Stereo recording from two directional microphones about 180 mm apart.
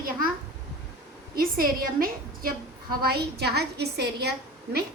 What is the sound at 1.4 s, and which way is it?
A woman's voice, 55° right (ahead or behind).